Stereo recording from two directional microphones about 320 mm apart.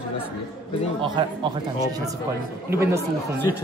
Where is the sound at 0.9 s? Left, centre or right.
Centre.